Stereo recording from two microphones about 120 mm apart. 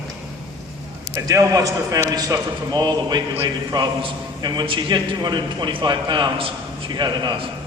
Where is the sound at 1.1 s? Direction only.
25° right (ahead or behind).